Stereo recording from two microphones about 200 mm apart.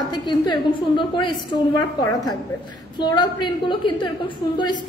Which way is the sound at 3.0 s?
20° left (ahead or behind).